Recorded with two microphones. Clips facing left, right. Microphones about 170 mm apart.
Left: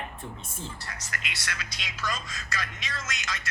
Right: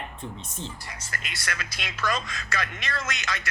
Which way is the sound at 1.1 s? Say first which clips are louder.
Right 3 dB; 45° right (ahead or behind).